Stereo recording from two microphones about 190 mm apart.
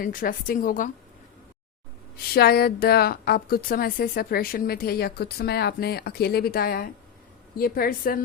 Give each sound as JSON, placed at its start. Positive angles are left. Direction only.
{"t": 0.0, "sound": "a woman's voice", "side_deg": 45}
{"t": 2.1, "sound": "a woman's voice", "side_deg": 55}